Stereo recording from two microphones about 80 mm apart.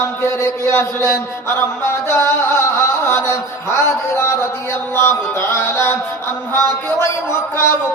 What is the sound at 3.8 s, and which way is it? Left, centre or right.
Speech, left.